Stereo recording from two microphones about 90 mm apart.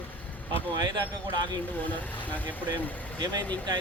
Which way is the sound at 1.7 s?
20° left (ahead or behind).